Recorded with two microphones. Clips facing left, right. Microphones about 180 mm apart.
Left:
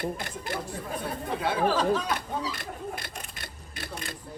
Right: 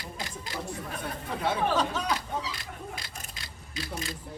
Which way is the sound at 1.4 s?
5° left (ahead or behind).